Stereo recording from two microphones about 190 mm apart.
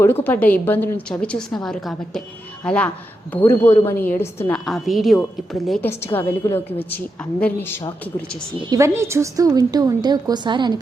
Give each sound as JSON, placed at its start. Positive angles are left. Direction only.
{"t": 0.0, "sound": "a woman's voice", "side_deg": 10}
{"t": 6.1, "sound": "a woman's voice", "side_deg": 10}
{"t": 8.7, "sound": "a woman's voice", "side_deg": -15}